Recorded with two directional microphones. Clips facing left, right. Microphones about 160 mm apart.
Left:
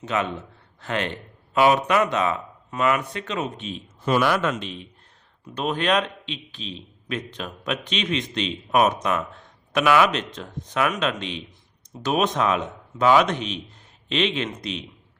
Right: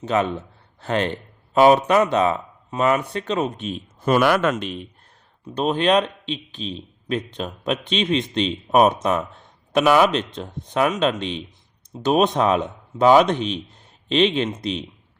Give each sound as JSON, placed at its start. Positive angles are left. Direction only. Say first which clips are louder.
{"t": 0.0, "sound": "speech", "louder": "right 5 dB", "side_deg": -35}
{"t": 5.5, "sound": "speech", "louder": "right 4 dB", "side_deg": -30}